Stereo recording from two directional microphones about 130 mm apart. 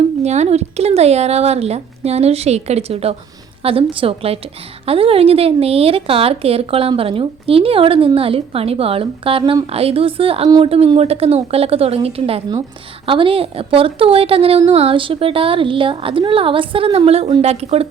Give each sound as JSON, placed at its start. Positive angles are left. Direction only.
{"t": 0.2, "sound": "speech", "side_deg": -55}